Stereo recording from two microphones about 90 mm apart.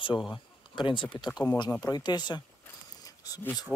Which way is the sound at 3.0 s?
45° left (ahead or behind).